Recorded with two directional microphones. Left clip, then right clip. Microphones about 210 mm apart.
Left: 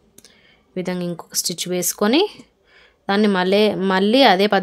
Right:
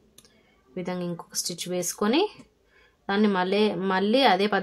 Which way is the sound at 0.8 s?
40° left (ahead or behind).